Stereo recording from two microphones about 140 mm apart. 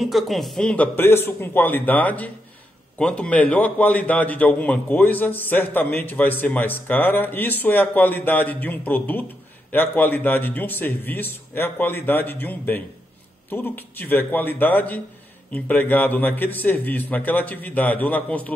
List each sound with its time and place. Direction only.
0.0 s a man's voice: centre (ahead or behind)